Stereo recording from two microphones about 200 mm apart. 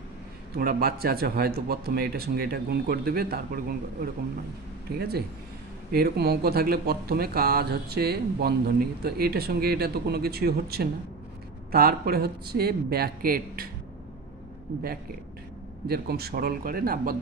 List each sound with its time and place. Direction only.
0.6 s speech: 50° right (ahead or behind)
15.9 s speech: 50° right (ahead or behind)